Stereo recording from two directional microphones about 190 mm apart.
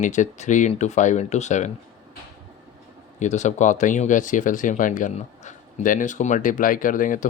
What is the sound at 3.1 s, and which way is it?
Speech, 40° left (ahead or behind).